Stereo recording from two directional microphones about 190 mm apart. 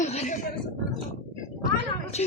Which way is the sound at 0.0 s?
35° left (ahead or behind).